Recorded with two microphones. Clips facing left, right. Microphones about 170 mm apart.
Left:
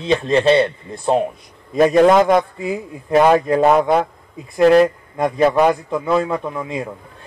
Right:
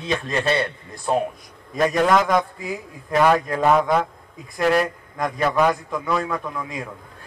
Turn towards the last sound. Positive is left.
turn(degrees=25)  # may be behind; listen again after turning